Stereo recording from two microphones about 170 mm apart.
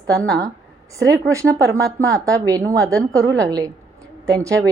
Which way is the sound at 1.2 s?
20° right (ahead or behind).